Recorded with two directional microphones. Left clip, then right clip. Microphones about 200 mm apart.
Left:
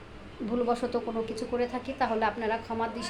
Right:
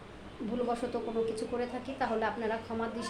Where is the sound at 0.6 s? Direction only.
15° left (ahead or behind).